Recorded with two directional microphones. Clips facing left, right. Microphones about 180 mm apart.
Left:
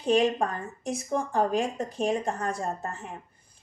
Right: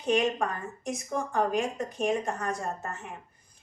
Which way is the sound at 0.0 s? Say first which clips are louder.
Left 3 dB; 30° left (ahead or behind).